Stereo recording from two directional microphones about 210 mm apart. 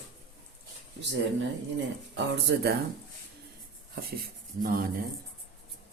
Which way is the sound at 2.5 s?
55° right (ahead or behind).